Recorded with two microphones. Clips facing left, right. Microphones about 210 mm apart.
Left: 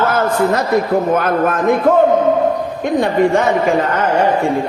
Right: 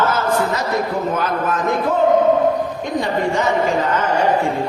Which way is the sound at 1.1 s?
55° left (ahead or behind).